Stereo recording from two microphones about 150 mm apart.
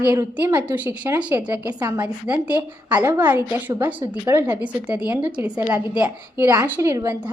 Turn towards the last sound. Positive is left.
turn(degrees=-20)  # may be behind; listen again after turning